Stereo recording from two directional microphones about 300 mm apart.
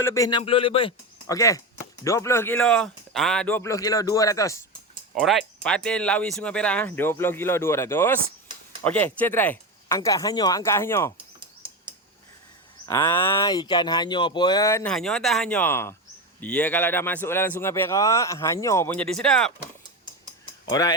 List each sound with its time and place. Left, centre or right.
0.0 s speech: centre
5.1 s speech: centre
11.3 s bird: centre
12.8 s speech: centre
20.7 s speech: centre